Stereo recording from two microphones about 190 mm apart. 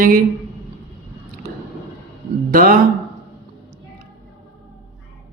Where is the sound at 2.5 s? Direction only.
50° right (ahead or behind).